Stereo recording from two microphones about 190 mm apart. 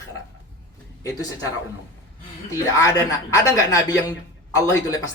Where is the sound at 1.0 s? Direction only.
20° left (ahead or behind).